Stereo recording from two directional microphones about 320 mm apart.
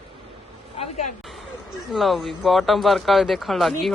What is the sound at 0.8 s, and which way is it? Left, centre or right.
Speech, centre.